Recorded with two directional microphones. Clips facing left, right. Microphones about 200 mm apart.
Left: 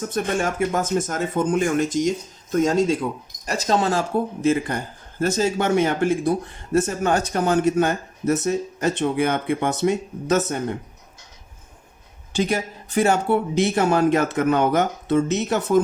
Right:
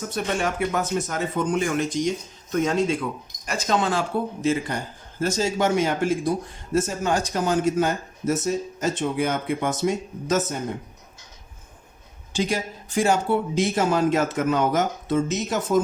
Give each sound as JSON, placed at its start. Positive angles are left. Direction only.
{"t": 0.1, "sound": "speech", "side_deg": 45}
{"t": 4.4, "sound": "speech", "side_deg": 50}
{"t": 12.3, "sound": "speech", "side_deg": 60}